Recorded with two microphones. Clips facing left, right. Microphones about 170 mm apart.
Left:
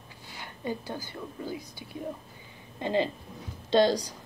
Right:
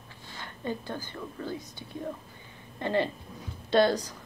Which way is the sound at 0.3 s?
10° left (ahead or behind).